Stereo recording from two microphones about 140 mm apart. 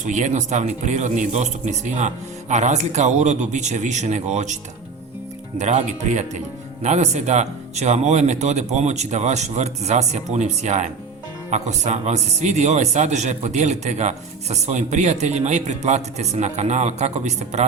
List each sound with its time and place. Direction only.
0.0 s speech: 60° right (ahead or behind)
5.5 s speech: 60° right (ahead or behind)